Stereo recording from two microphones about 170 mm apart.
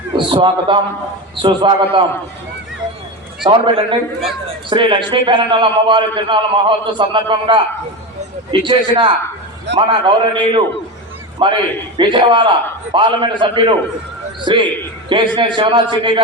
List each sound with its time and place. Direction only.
0.3 s a man's voice: 30° right (ahead or behind)
3.4 s a man's voice: 30° right (ahead or behind)
8.6 s a man's voice: 30° right (ahead or behind)